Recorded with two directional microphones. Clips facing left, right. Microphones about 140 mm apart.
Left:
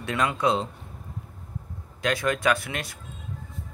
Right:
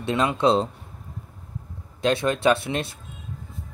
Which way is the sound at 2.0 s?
25° right (ahead or behind).